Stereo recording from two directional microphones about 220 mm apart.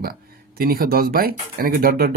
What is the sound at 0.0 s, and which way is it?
Speech, 40° right (ahead or behind).